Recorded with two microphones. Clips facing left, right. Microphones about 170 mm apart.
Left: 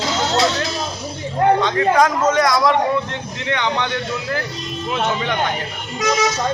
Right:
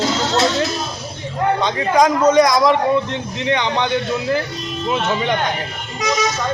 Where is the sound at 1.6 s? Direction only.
15° right (ahead or behind).